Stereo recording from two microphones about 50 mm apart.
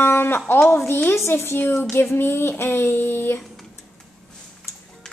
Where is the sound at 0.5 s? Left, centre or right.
Left.